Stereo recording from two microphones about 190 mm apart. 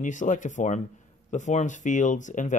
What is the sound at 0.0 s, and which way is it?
Speech, 40° left (ahead or behind).